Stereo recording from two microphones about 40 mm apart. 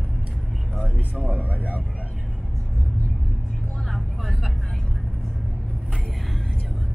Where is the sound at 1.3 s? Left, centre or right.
Right.